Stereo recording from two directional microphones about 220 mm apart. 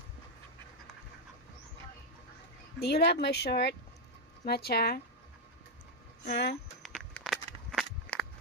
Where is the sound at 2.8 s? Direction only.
45° left (ahead or behind).